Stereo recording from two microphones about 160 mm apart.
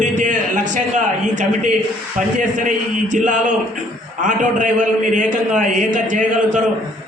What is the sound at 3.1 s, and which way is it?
A man's voice, 50° right (ahead or behind).